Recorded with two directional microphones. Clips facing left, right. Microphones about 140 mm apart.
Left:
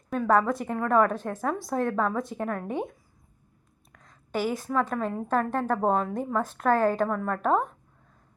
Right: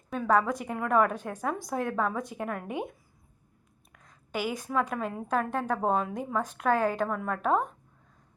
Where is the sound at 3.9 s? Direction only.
5° right (ahead or behind).